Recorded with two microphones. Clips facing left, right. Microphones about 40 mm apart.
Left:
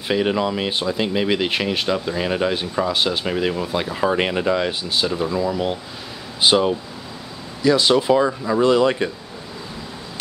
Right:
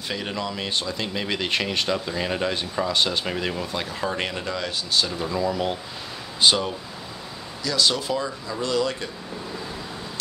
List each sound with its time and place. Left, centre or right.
0.1 s speech: left; by 5.8 s centre
6.4 s speech: centre
8.3 s speech: left
8.6 s a man's voice: left